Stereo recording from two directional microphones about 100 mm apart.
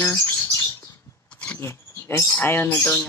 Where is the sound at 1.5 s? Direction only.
25° left (ahead or behind).